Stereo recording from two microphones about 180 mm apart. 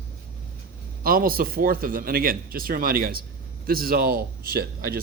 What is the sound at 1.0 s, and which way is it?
Speech, 55° right (ahead or behind).